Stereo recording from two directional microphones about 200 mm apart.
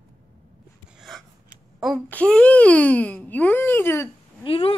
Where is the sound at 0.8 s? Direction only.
Centre (ahead or behind).